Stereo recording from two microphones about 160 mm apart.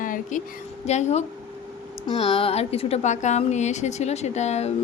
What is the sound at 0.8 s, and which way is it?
A woman's voice, 45° left (ahead or behind).